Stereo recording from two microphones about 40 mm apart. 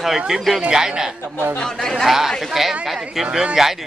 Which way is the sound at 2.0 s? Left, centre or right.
Centre.